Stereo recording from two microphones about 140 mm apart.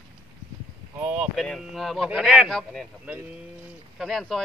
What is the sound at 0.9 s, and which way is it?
Speech, 5° right (ahead or behind).